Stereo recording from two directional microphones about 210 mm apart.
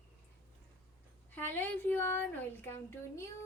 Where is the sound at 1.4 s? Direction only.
10° left (ahead or behind).